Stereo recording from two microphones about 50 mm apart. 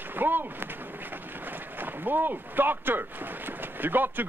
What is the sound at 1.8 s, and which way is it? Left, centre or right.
Speech, right.